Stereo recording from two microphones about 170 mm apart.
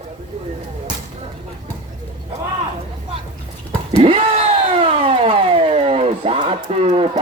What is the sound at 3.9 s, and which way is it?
Speech, 30° right (ahead or behind).